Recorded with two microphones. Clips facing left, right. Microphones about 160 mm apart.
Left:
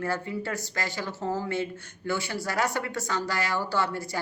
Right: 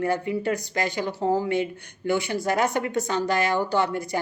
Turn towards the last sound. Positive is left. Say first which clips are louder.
# right 5 dB
turn(degrees=-20)  # may be behind; listen again after turning